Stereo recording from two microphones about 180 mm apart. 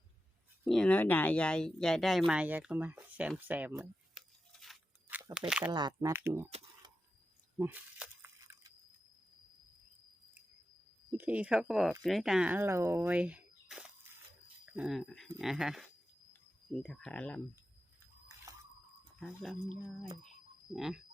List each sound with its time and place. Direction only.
0.6 s speech: centre (ahead or behind)
4.1 s a sound: centre (ahead or behind)
5.0 s a sound: 10° right (ahead or behind)
5.5 s speech: 10° right (ahead or behind)
5.7 s speech: 20° right (ahead or behind)
7.6 s speech: 10° right (ahead or behind)
11.1 s speech: 10° right (ahead or behind)
14.7 s dog: 5° right (ahead or behind)
15.4 s speech: 5° right (ahead or behind)
19.2 s speech: centre (ahead or behind)